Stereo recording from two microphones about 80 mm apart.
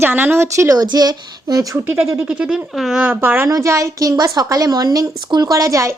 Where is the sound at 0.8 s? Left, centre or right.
Right.